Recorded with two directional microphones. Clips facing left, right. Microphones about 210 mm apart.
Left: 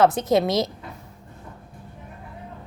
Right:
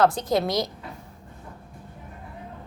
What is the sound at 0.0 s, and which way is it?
Speech, 20° left (ahead or behind).